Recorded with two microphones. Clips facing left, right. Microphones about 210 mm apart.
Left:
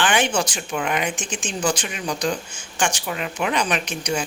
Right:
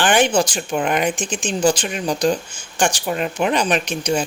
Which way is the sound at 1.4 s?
30° right (ahead or behind).